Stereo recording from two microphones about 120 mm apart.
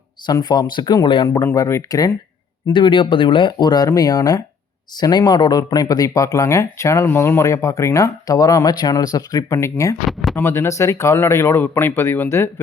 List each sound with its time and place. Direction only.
0.3 s speech: 35° left (ahead or behind)
2.6 s speech: 40° left (ahead or behind); by 9.9 s 25° left (ahead or behind)
10.1 s speech: centre (ahead or behind)
10.3 s speech: 20° left (ahead or behind)